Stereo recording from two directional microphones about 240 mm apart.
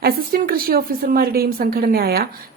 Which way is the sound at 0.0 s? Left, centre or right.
Right.